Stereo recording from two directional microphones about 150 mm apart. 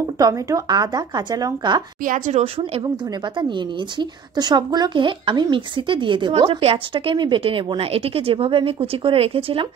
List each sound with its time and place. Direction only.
0.2 s speech: 20° right (ahead or behind)
2.0 s speech: 55° right (ahead or behind)
3.3 s a woman's voice: 30° right (ahead or behind)